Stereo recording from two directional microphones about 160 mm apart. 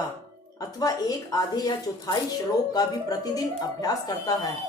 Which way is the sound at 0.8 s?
25° left (ahead or behind).